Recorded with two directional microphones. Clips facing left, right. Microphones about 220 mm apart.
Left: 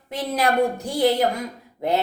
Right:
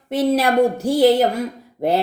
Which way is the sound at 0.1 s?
30° right (ahead or behind).